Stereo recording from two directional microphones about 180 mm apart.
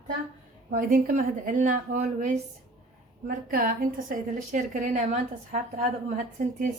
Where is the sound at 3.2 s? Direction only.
50° right (ahead or behind).